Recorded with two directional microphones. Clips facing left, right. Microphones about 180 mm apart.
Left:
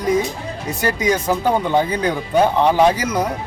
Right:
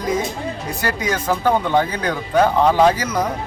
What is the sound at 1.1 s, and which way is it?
Speech, 10° left (ahead or behind).